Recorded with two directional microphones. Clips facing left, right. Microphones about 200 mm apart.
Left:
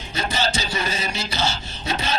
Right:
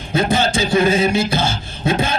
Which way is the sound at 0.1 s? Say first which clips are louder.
Right 8 dB; 55° right (ahead or behind).